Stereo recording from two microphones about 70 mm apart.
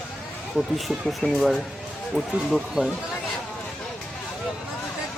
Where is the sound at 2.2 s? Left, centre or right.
Centre.